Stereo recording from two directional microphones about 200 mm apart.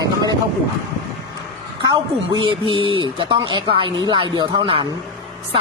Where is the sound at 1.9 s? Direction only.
25° right (ahead or behind).